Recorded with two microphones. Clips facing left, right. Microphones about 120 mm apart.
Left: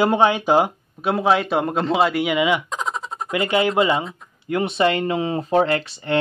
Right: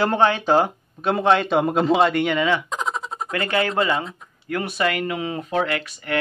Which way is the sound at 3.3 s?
15° left (ahead or behind).